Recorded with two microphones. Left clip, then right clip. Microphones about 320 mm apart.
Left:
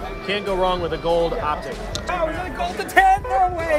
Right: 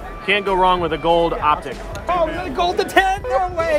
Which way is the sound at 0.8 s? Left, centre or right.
Right.